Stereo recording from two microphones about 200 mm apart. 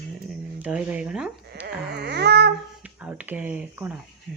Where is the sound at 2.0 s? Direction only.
55° right (ahead or behind).